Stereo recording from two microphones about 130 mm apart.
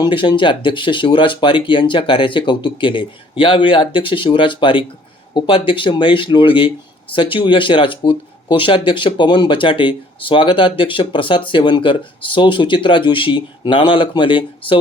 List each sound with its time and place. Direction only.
0.0 s speech: 40° left (ahead or behind)